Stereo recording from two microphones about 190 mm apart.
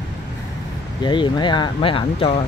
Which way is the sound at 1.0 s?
25° left (ahead or behind).